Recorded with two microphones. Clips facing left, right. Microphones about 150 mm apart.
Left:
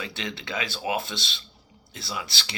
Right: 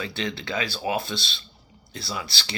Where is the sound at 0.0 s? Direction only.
15° left (ahead or behind).